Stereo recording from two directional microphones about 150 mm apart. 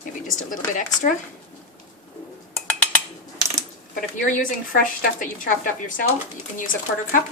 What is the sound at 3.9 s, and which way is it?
A woman's voice, 60° left (ahead or behind).